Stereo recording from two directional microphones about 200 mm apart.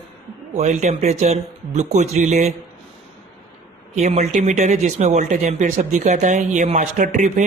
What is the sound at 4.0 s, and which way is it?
Speech, 35° right (ahead or behind).